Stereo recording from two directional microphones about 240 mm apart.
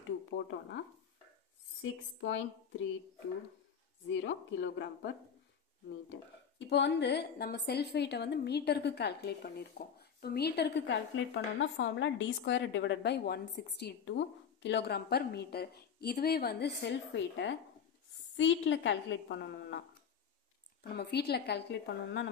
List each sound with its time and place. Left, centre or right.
0.5 s a woman's voice: left
4.1 s a woman's voice: left
6.7 s a woman's voice: left
20.9 s a woman's voice: left